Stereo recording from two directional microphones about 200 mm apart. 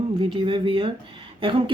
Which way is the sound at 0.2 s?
25° right (ahead or behind).